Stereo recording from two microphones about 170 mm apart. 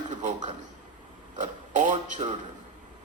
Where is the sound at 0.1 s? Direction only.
45° right (ahead or behind).